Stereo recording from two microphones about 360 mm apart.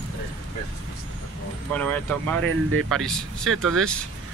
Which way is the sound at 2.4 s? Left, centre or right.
Right.